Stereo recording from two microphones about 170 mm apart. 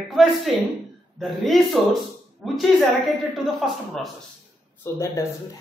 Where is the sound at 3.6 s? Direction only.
5° right (ahead or behind).